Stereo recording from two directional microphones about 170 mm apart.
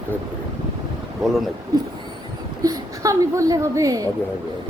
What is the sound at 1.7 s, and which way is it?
A woman's voice, 20° right (ahead or behind).